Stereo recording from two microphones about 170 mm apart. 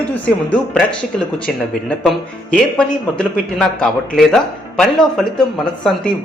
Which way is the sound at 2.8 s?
5° left (ahead or behind).